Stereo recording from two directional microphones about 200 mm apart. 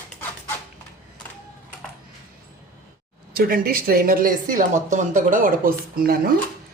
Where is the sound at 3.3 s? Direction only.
45° right (ahead or behind).